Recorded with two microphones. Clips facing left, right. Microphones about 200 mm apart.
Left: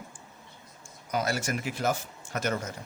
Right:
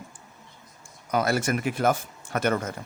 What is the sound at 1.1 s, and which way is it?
Speech, 60° right (ahead or behind).